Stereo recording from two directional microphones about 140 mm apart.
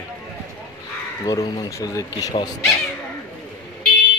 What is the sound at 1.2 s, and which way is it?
Speech, 25° left (ahead or behind).